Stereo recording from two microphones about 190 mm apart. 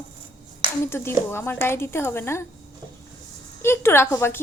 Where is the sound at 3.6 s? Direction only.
15° left (ahead or behind).